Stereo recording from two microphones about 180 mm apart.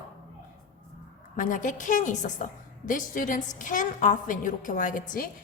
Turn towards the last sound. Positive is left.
turn(degrees=45)  # may be behind; listen again after turning